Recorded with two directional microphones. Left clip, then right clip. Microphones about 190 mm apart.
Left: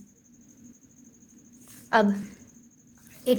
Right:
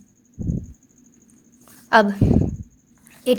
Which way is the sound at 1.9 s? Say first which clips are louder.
Right 7 dB; 30° right (ahead or behind).